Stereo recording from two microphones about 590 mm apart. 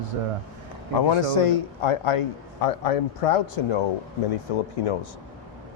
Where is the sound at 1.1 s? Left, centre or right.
Left.